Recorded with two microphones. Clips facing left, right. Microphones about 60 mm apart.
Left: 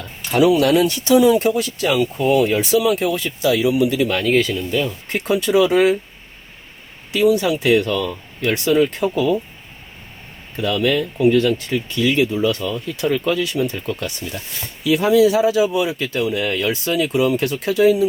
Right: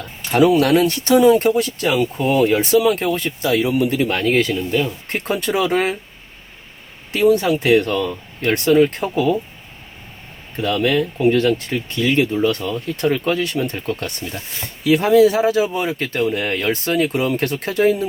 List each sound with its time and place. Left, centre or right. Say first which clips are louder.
0.3 s speech: even; right
2.6 s speech: right 1 dB; right
7.1 s speech: right 1 dB; right
10.6 s speech: right 1 dB; right